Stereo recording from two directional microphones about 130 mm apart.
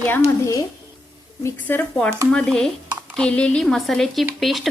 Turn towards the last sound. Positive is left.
turn(degrees=0)  # may be behind; listen again after turning